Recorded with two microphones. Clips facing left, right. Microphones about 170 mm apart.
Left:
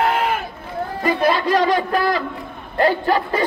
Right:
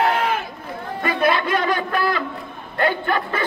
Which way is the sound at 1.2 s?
35° left (ahead or behind).